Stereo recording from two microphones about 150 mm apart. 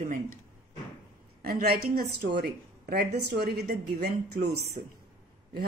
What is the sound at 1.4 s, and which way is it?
A woman's voice, 85° right.